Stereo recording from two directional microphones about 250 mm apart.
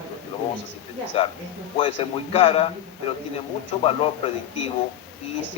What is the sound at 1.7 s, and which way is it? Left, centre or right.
A man's voice, left.